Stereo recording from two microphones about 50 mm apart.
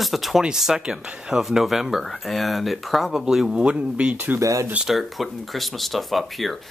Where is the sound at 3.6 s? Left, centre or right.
Right.